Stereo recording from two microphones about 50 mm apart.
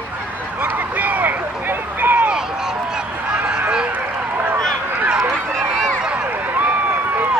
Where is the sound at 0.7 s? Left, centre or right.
Right.